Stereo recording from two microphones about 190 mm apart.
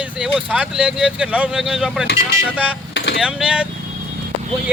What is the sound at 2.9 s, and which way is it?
Vehicle, 60° left (ahead or behind).